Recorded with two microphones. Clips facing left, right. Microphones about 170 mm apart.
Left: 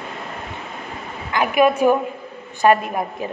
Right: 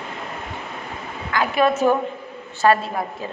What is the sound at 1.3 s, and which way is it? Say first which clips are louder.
A woman's voice: left 3 dB; 15° left (ahead or behind).